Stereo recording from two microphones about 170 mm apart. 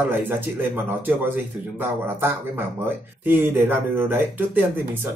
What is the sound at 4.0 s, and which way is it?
Speech, 10° right (ahead or behind).